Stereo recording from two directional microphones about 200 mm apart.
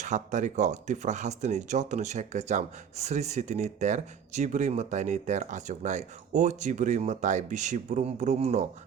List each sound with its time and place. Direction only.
0.0 s speech: 35° right (ahead or behind)